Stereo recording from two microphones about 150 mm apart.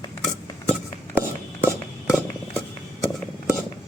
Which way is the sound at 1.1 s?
15° right (ahead or behind).